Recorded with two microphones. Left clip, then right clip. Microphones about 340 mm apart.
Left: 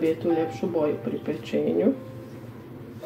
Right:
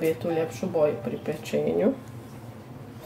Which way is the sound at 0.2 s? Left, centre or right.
Right.